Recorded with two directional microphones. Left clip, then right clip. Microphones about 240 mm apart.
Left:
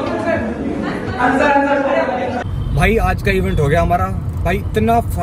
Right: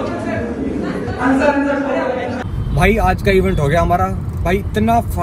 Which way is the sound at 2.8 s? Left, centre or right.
Centre.